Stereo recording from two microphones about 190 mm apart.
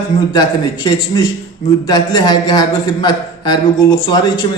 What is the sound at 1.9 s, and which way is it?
A man's voice, 20° left (ahead or behind).